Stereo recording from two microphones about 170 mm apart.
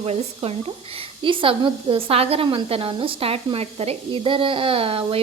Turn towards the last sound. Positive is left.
turn(degrees=-35)  # may be behind; listen again after turning